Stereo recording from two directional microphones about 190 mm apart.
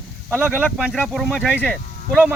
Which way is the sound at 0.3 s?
5° right (ahead or behind).